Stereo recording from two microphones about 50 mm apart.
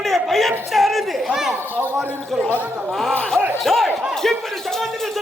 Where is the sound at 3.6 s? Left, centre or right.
Centre.